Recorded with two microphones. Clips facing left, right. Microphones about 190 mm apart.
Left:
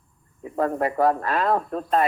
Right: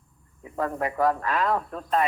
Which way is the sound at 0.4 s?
40° left (ahead or behind).